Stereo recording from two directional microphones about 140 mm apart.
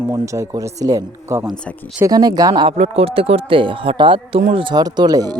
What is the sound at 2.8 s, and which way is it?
Speech, 45° right (ahead or behind).